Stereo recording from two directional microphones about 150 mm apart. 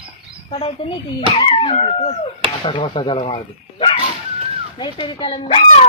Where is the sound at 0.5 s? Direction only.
40° left (ahead or behind).